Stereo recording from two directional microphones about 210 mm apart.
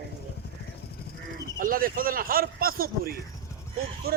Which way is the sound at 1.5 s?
40° right (ahead or behind).